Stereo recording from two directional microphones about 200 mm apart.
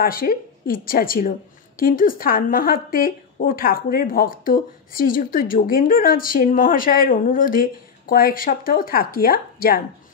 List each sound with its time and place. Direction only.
0.0 s a woman's voice: 45° left (ahead or behind)